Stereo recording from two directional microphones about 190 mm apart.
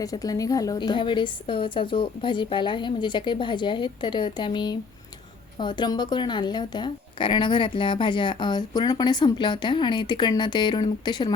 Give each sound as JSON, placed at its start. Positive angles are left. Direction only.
{"t": 0.0, "sound": "a woman's voice", "side_deg": 20}